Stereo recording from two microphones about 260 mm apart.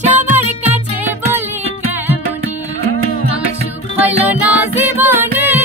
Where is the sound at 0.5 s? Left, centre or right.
Centre.